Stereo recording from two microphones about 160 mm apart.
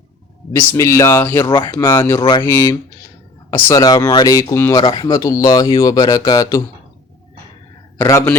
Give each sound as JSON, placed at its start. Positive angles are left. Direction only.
{"t": 0.7, "sound": "speech", "side_deg": 20}
{"t": 1.5, "sound": "speech", "side_deg": 25}
{"t": 4.7, "sound": "speech", "side_deg": 25}
{"t": 7.9, "sound": "speech", "side_deg": 15}